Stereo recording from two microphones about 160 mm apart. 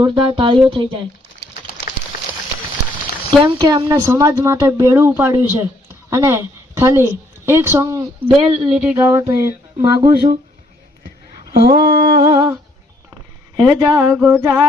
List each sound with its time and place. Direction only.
0.0 s speech: 30° right (ahead or behind)
3.2 s speech: 30° right (ahead or behind)
3.7 s speech: 20° right (ahead or behind)
8.4 s speech: 40° right (ahead or behind)
8.8 s speech: 10° right (ahead or behind); by 10.3 s 25° right (ahead or behind)
11.5 s mantra: 75° right (ahead or behind)
12.3 s speech: 25° right (ahead or behind)
13.6 s speech: 25° right (ahead or behind)
14.2 s speech: 5° right (ahead or behind)